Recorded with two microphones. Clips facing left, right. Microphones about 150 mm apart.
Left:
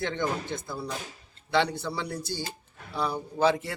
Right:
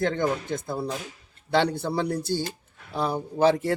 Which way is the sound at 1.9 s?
50° right (ahead or behind).